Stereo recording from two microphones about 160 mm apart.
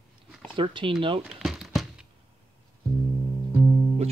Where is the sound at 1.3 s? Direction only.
5° right (ahead or behind).